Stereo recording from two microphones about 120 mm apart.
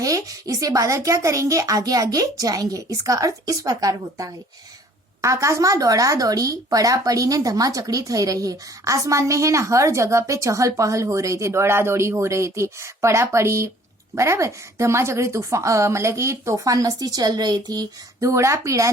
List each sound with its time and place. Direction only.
0.0 s speech: 30° right (ahead or behind)